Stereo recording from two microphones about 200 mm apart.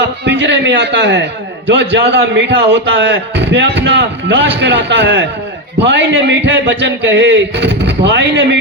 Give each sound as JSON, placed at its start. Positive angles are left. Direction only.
{"t": 0.3, "sound": "a man's voice", "side_deg": -60}